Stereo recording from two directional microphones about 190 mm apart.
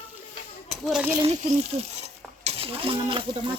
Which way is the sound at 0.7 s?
Centre (ahead or behind).